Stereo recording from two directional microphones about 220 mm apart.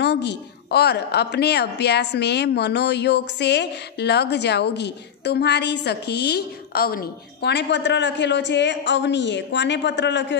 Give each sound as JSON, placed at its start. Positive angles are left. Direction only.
{"t": 0.0, "sound": "a woman's voice", "side_deg": 50}